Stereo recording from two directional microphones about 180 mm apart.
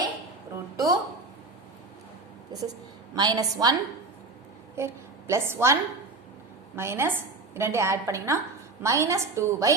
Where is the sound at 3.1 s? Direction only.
20° right (ahead or behind).